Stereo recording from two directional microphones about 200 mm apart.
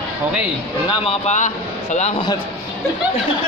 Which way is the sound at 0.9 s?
30° left (ahead or behind).